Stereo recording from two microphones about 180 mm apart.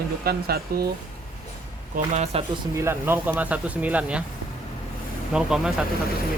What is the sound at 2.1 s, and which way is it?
Speech, 40° right (ahead or behind).